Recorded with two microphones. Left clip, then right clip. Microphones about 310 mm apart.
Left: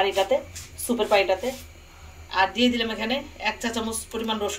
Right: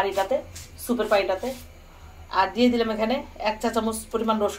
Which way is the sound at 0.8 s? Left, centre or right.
Centre.